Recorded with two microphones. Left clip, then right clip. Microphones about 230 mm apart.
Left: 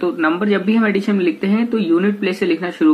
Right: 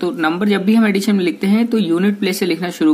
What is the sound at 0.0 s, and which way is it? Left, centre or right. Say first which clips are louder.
Speech: even; right.